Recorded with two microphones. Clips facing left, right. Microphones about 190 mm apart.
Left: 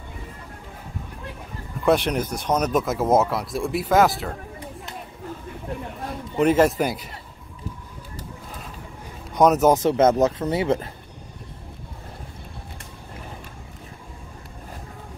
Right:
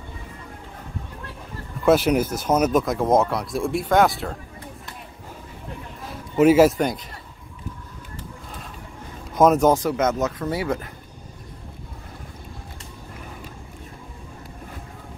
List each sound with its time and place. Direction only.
1.9 s speech: 5° right (ahead or behind)
6.3 s speech: 5° right (ahead or behind)
9.3 s speech: centre (ahead or behind)
9.7 s speech: 25° left (ahead or behind)